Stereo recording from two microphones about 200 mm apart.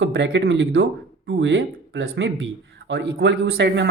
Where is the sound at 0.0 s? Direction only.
65° right (ahead or behind); by 0.9 s 80° right.